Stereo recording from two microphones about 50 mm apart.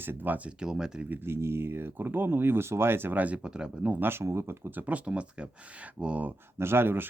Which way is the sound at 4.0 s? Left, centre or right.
Right.